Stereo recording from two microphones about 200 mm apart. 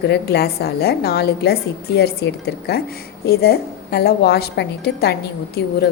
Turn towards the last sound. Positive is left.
turn(degrees=50)  # may be behind; listen again after turning